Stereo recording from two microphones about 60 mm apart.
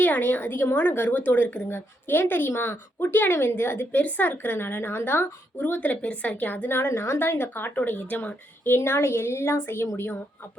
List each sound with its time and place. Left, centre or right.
0.0 s speech: left
4.0 s speech: left